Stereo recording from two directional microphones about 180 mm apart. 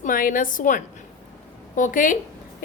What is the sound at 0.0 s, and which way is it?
Speech, 50° left (ahead or behind).